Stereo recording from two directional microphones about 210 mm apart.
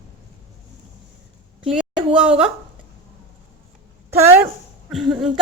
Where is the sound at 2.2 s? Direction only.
5° right (ahead or behind).